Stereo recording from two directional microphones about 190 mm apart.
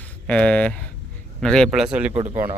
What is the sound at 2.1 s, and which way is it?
Speech, 35° right (ahead or behind).